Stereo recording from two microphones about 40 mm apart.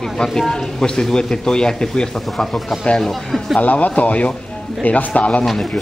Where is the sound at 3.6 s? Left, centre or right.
Left.